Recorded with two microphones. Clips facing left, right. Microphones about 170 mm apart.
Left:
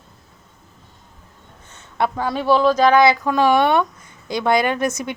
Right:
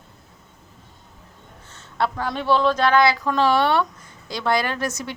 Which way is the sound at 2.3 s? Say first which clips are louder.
Left 4 dB; 10° left (ahead or behind).